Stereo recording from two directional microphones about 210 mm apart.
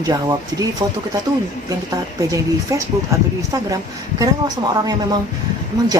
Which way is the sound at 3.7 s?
15° right (ahead or behind).